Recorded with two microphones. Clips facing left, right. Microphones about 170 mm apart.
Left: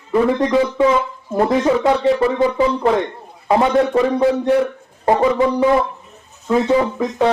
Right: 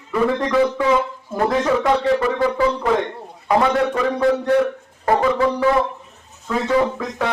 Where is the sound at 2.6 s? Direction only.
20° left (ahead or behind).